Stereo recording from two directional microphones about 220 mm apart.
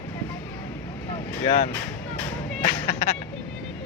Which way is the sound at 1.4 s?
30° left (ahead or behind).